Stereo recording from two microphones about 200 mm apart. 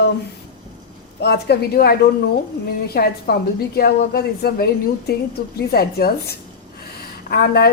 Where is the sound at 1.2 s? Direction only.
55° left (ahead or behind).